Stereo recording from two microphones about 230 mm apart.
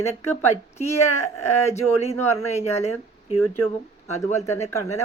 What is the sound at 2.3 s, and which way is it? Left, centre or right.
Speech, centre.